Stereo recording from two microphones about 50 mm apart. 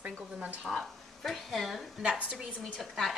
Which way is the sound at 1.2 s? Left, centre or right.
Centre.